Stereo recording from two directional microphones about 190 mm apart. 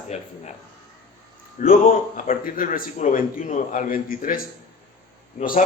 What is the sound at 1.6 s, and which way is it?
Speech, 40° left (ahead or behind).